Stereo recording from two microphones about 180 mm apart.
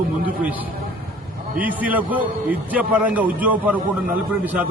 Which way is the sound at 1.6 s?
10° right (ahead or behind).